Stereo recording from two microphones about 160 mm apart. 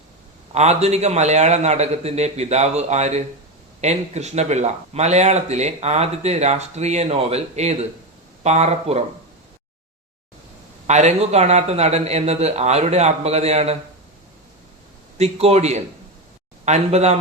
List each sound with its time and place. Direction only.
0.5 s speech: 45° right (ahead or behind)
10.8 s speech: 45° right (ahead or behind)
15.2 s speech: 40° right (ahead or behind)